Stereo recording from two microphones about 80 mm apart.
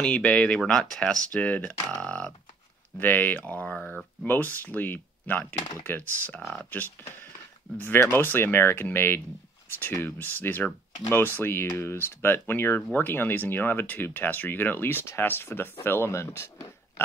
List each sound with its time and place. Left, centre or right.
0.0 s speech: centre
3.0 s speech: left
4.3 s speech: left